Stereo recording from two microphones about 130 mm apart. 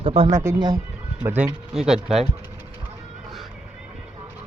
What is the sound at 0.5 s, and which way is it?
Speech, 35° right (ahead or behind).